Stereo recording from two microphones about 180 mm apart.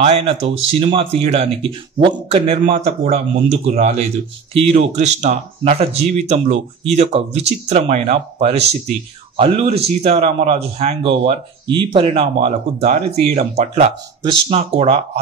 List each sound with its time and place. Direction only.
0.0 s speech: 35° right (ahead or behind)